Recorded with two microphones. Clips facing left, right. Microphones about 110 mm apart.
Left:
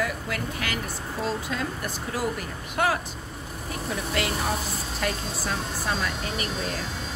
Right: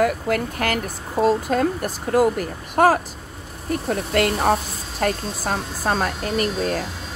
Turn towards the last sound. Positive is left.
turn(degrees=-50)  # may be behind; listen again after turning